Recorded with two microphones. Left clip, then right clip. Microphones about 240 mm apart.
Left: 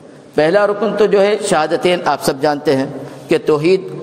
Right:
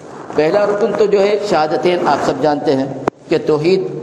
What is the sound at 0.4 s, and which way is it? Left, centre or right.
A man's voice, left.